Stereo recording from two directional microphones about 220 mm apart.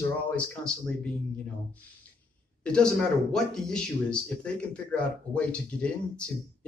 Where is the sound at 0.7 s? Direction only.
5° left (ahead or behind).